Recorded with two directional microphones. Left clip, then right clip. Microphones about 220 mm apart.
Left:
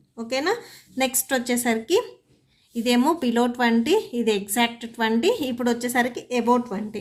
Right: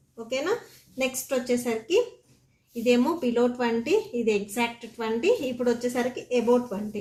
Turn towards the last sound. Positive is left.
turn(degrees=40)  # may be behind; listen again after turning